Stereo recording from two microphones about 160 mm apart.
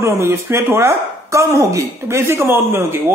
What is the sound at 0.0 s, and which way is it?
Speech, 15° right (ahead or behind).